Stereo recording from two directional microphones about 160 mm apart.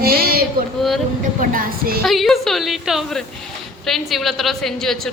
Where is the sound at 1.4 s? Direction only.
60° right (ahead or behind).